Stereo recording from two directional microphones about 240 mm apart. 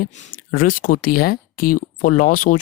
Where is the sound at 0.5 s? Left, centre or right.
Left.